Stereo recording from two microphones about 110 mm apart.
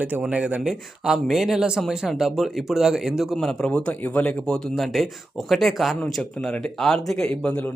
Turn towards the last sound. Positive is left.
turn(degrees=10)  # may be behind; listen again after turning